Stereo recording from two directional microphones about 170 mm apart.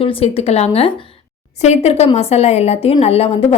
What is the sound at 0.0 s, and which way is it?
A woman's voice, 35° left (ahead or behind).